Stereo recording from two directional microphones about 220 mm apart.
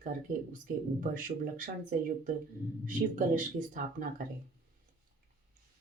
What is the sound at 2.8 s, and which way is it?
Speech, 35° right (ahead or behind).